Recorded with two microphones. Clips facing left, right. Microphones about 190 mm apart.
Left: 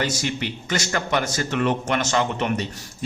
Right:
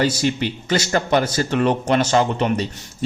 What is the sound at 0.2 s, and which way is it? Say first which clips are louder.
A man's voice: right 6 dB; 30° right (ahead or behind).